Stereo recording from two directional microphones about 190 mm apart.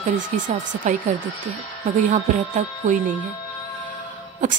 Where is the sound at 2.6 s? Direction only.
40° right (ahead or behind).